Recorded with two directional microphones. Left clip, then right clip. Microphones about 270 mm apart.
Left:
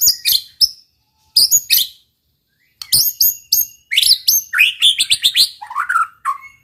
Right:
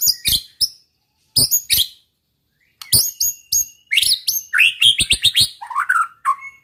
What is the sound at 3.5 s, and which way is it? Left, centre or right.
Bird, centre.